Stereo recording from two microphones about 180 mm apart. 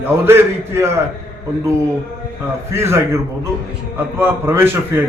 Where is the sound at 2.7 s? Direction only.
15° right (ahead or behind).